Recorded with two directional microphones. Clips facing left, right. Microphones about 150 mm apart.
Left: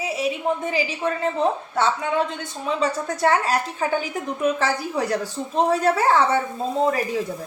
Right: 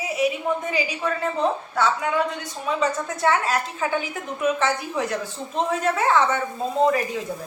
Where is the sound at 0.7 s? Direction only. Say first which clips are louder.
Left 2 dB; 30° left (ahead or behind).